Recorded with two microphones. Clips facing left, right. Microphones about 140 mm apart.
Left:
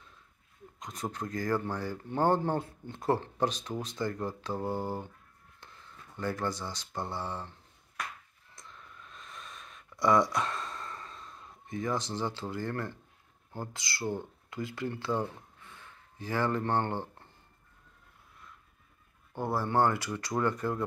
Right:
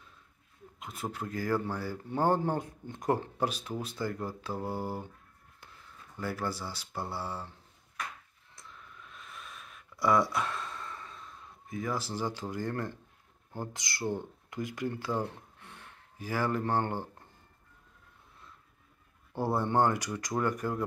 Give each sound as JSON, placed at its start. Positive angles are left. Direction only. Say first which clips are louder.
{"t": 0.7, "sound": "speech", "louder": "left 1 dB", "side_deg": -5}
{"t": 6.1, "sound": "speech", "louder": "left 2 dB", "side_deg": -5}
{"t": 8.5, "sound": "a sound", "louder": "even", "side_deg": 0}
{"t": 13.6, "sound": "speech", "louder": "right 1 dB", "side_deg": -20}
{"t": 19.5, "sound": "speech", "louder": "even", "side_deg": -20}